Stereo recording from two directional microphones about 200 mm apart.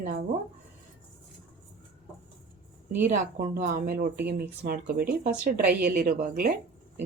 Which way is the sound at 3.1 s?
40° right (ahead or behind).